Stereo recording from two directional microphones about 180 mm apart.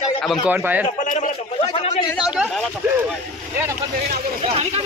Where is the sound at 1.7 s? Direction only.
35° left (ahead or behind).